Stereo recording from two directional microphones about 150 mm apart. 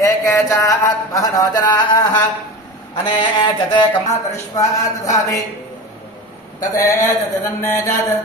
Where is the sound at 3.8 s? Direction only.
20° left (ahead or behind).